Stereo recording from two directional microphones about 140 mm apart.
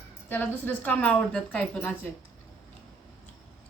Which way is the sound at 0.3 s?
15° left (ahead or behind).